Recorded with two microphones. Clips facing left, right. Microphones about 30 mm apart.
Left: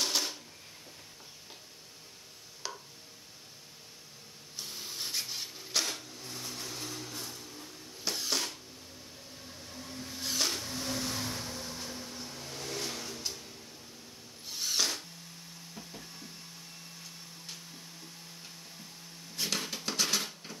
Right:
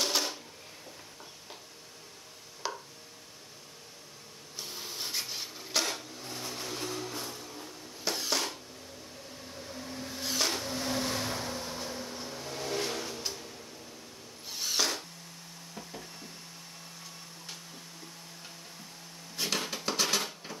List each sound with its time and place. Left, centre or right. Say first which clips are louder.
0.0 s drum: right 2 dB; centre
2.6 s chopping: right 5 dB; centre
4.6 s dishes: right 1 dB; centre
8.0 s a sound: right 2 dB; centre
9.5 s train: right 4 dB; centre
10.2 s vehicle: right 2 dB; centre
14.5 s a sound: right 1 dB; centre
19.3 s dishes: right 2 dB; centre